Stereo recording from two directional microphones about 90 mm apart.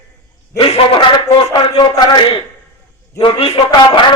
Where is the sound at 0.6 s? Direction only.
80° left.